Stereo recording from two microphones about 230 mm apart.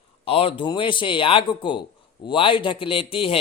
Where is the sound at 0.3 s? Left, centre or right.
Left.